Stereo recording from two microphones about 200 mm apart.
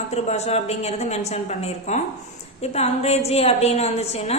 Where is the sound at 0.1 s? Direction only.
35° left (ahead or behind).